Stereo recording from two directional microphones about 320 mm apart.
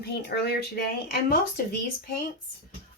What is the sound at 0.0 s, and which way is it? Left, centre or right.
Speech, left.